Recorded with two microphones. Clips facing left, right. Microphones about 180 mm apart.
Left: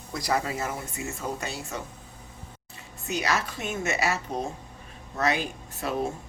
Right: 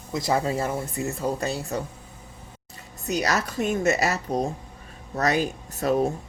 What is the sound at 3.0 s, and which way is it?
Speech, 40° right (ahead or behind).